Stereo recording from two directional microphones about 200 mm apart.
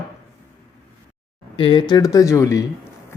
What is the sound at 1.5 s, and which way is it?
Speech, 25° left (ahead or behind).